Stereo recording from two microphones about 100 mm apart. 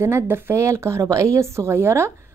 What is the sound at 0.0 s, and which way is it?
Speech, 25° right (ahead or behind).